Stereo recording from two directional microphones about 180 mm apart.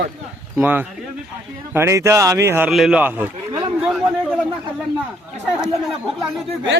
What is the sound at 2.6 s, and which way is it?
Speech, 5° right (ahead or behind).